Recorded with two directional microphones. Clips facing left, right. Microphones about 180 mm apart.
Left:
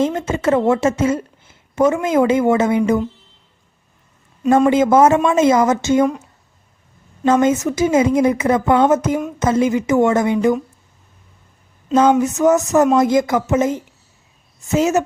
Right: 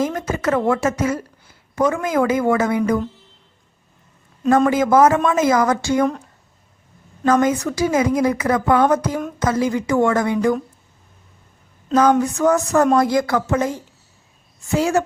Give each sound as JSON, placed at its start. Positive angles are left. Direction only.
{"t": 0.0, "sound": "a woman's voice", "side_deg": 25}
{"t": 4.7, "sound": "a woman's voice", "side_deg": 25}
{"t": 7.3, "sound": "a woman's voice", "side_deg": 25}
{"t": 12.2, "sound": "a woman's voice", "side_deg": 20}